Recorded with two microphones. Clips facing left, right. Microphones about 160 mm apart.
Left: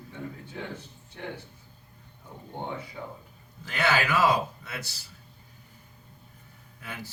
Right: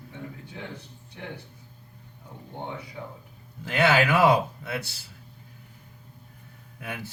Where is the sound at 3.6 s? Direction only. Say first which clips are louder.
Right 5 dB; 55° right (ahead or behind).